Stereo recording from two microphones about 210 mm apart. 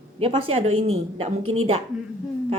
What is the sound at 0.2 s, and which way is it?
A woman's voice, 25° right (ahead or behind).